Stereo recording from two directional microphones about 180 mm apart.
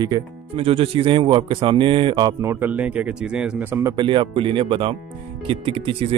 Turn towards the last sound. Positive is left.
turn(degrees=-30)  # may be behind; listen again after turning